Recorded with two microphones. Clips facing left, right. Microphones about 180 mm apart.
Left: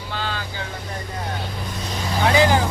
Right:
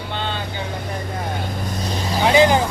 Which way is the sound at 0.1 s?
20° right (ahead or behind).